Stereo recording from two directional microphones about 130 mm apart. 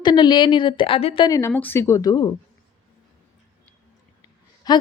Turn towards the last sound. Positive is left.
turn(degrees=30)  # may be behind; listen again after turning